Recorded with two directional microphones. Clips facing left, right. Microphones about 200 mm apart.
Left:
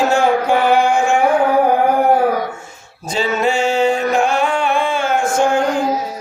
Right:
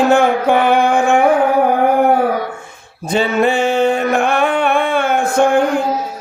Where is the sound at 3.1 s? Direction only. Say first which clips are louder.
Right 3 dB; 55° right (ahead or behind).